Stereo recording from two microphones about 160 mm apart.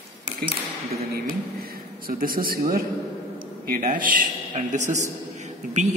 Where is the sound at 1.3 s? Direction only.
70° right (ahead or behind).